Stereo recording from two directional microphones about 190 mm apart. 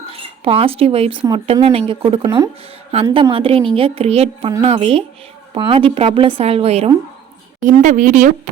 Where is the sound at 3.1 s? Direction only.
30° right (ahead or behind).